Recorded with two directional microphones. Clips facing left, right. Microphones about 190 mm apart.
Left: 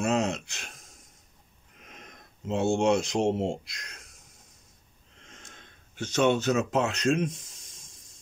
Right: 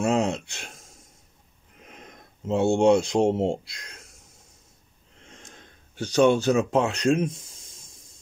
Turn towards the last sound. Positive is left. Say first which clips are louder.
# right 3 dB
turn(degrees=-30)  # may be behind; listen again after turning